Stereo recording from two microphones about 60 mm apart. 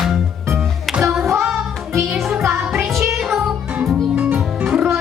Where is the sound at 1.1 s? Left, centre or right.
Centre.